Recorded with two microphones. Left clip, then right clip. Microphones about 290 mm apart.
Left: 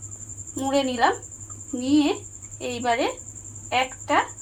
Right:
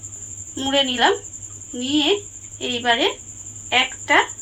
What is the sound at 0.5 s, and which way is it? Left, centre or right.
A woman's voice, left.